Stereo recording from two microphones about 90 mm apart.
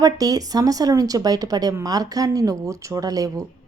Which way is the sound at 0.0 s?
40° right (ahead or behind).